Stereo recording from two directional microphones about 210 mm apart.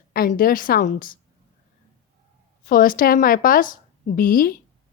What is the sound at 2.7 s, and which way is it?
Speech, 40° left (ahead or behind).